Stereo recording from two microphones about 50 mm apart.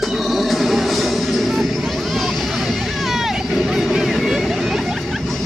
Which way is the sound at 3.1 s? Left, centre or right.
Centre.